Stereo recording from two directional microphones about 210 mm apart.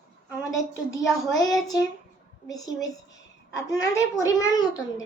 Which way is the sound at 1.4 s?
15° left (ahead or behind).